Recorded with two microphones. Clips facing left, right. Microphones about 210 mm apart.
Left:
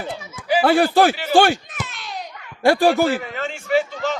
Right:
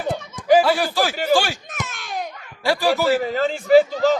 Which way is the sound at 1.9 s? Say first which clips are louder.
Right 4 dB; 50° right (ahead or behind).